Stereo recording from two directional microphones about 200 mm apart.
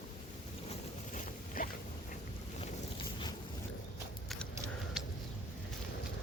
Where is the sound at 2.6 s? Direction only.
25° left (ahead or behind).